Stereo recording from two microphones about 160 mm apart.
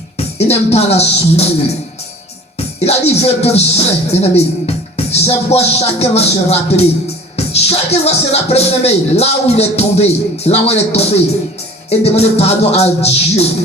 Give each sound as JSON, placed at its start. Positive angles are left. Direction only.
{"t": 0.3, "sound": "speech", "side_deg": 40}
{"t": 2.8, "sound": "speech", "side_deg": 40}